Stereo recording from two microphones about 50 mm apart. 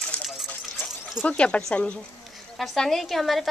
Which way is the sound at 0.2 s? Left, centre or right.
Centre.